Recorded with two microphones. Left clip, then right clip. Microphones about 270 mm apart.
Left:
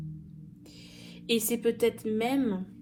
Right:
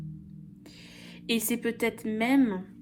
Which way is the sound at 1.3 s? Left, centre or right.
Right.